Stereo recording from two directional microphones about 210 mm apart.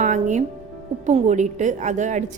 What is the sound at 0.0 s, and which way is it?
Music, 35° right (ahead or behind).